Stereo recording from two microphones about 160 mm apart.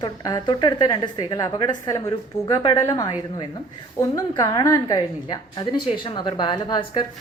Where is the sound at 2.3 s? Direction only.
45° left (ahead or behind).